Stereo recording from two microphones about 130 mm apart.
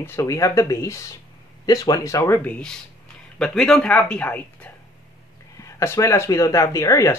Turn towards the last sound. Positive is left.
turn(degrees=25)  # may be behind; listen again after turning